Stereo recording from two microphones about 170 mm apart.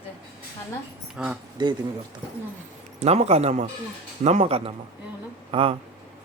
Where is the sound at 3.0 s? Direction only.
40° right (ahead or behind).